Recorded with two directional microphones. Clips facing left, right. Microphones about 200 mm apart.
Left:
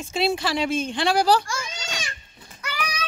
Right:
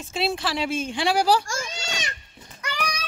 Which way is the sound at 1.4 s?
45° right (ahead or behind).